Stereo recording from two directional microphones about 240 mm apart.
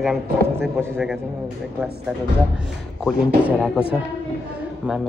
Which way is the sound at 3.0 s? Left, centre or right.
Centre.